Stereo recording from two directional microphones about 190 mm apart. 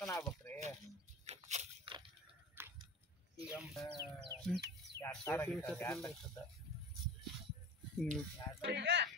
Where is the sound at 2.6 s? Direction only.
10° right (ahead or behind).